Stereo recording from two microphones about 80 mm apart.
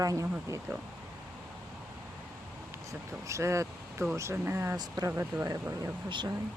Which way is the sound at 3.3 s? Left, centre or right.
Right.